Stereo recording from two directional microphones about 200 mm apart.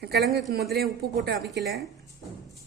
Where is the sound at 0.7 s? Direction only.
50° right (ahead or behind).